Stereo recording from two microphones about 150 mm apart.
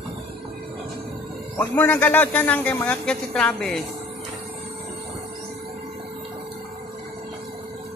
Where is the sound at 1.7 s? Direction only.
10° left (ahead or behind).